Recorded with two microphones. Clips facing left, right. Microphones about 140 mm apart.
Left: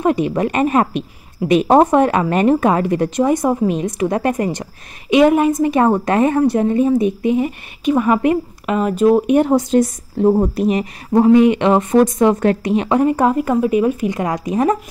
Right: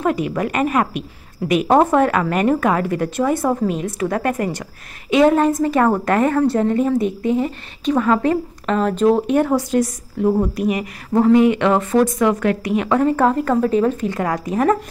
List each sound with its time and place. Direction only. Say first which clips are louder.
0.0 s a woman's voice: left 3 dB; 25° left (ahead or behind)
11.1 s a woman's voice: left 2 dB; 20° left (ahead or behind)